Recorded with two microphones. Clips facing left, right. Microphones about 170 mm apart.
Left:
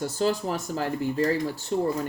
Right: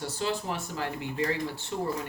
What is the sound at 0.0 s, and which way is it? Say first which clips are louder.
Speech: left 6 dB; 40° left (ahead or behind).